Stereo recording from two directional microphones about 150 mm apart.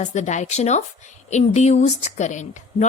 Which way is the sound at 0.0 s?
55° left (ahead or behind).